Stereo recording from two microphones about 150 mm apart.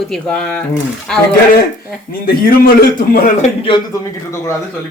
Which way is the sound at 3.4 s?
35° left (ahead or behind).